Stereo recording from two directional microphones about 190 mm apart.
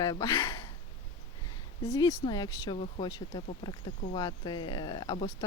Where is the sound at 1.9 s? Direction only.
15° left (ahead or behind).